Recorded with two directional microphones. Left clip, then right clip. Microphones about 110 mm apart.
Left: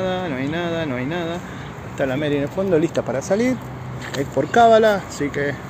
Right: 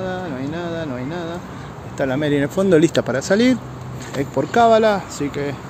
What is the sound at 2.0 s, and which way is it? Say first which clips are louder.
Speech: right 2 dB; 65° right (ahead or behind).